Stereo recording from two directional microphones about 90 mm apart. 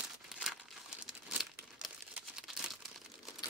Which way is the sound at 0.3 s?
5° right (ahead or behind).